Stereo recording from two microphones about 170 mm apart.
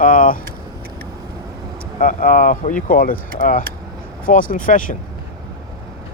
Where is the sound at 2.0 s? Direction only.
55° left (ahead or behind).